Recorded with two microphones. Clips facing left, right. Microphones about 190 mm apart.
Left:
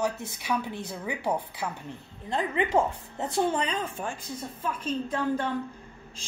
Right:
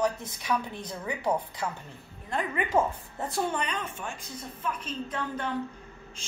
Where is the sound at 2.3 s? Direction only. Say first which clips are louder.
Left 2 dB; 30° left (ahead or behind).